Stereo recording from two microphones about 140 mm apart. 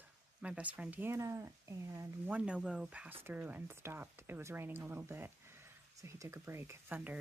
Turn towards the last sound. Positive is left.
turn(degrees=-10)  # may be behind; listen again after turning